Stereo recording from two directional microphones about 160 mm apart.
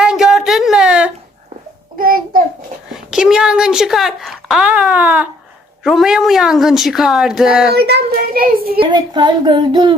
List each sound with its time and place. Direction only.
0.0 s a sound: 5° right (ahead or behind)
2.0 s child singing: 65° right (ahead or behind)
2.9 s a woman's voice: 5° right (ahead or behind)
7.7 s a child's voice: 90° right; by 8.8 s 70° right (ahead or behind)
8.8 s speech: 25° right (ahead or behind)